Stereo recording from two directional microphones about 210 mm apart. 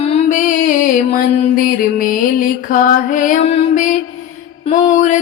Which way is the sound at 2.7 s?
40° left (ahead or behind).